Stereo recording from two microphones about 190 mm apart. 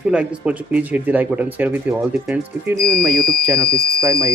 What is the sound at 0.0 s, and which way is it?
Speech, 5° right (ahead or behind).